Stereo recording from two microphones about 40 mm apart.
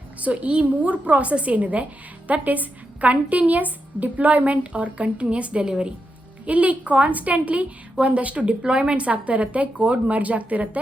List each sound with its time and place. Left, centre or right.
0.2 s a woman's voice: right